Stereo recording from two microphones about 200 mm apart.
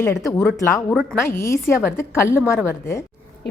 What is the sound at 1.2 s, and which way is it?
A woman's voice, 15° left (ahead or behind).